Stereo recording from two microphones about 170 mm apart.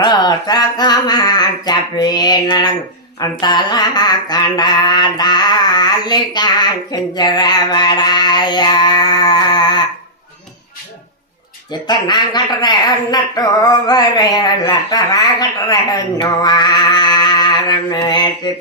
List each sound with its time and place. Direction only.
0.0 s speech: 25° left (ahead or behind)
11.7 s speech: 25° left (ahead or behind)